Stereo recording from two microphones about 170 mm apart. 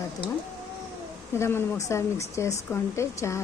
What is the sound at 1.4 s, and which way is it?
Speech, 15° left (ahead or behind).